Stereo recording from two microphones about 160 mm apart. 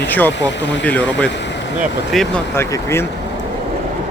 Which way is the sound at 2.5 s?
15° left (ahead or behind).